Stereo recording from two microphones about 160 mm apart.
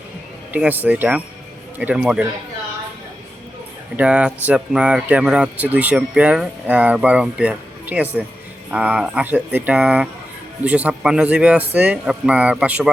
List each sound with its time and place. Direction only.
0.5 s speech: 10° right (ahead or behind)
3.9 s speech: 5° right (ahead or behind)